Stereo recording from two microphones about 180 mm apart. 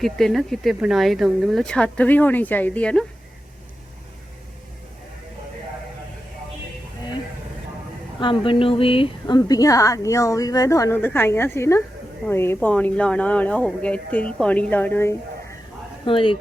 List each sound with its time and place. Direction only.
0.0 s speech: centre (ahead or behind)
8.2 s speech: 30° left (ahead or behind); by 15.1 s 10° left (ahead or behind)
16.0 s speech: 30° left (ahead or behind)